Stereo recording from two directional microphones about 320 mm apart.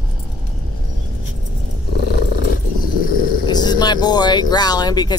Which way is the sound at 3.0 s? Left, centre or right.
Left.